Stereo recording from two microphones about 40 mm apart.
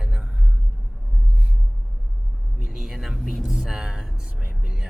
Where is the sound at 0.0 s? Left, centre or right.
Right.